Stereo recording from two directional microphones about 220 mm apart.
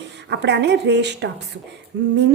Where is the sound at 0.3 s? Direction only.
50° right (ahead or behind).